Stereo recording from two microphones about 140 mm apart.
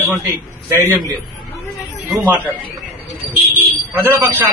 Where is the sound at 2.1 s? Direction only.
10° right (ahead or behind).